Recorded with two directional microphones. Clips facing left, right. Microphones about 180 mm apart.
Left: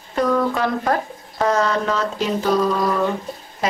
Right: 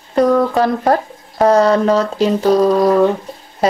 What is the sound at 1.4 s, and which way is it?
Speech, 35° right (ahead or behind).